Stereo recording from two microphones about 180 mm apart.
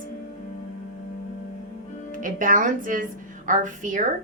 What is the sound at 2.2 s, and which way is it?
A woman's voice, 45° right (ahead or behind).